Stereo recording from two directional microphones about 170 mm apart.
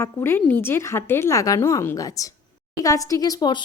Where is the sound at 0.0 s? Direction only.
15° left (ahead or behind).